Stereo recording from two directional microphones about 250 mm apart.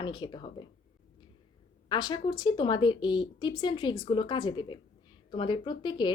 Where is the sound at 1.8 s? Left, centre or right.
Centre.